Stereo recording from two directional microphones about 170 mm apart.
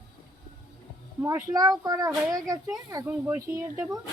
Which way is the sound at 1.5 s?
20° right (ahead or behind).